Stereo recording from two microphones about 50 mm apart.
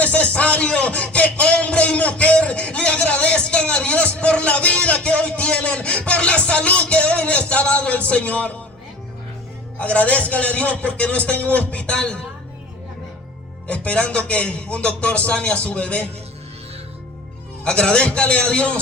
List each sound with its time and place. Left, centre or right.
0.0 s a sound: left
9.7 s a man's voice: left
13.7 s a man's voice: left
17.6 s a man's voice: centre